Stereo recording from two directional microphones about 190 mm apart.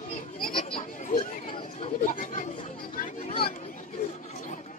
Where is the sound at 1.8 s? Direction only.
45° left (ahead or behind).